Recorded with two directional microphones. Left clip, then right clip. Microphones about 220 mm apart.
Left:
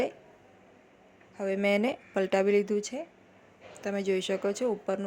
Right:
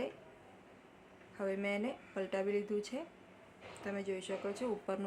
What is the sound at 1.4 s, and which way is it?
Speech, 30° left (ahead or behind).